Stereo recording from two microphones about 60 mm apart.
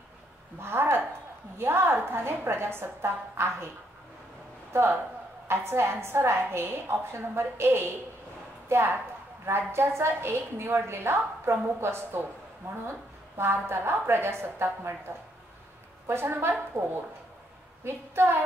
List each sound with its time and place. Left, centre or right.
0.6 s a sound: right
1.6 s a woman's voice: right
5.5 s a woman's voice: right